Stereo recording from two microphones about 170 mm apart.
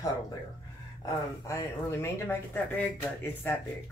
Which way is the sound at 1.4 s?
15° left (ahead or behind).